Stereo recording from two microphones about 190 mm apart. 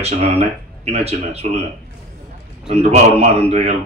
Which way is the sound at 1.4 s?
35° right (ahead or behind).